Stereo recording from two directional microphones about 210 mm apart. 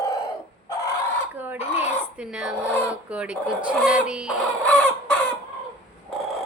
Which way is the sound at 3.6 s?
5° right (ahead or behind).